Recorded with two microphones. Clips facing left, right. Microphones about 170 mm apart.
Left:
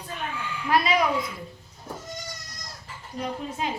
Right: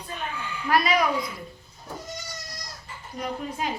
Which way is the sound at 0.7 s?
25° left (ahead or behind).